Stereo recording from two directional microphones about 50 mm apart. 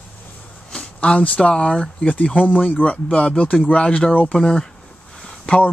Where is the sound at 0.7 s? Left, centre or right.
Centre.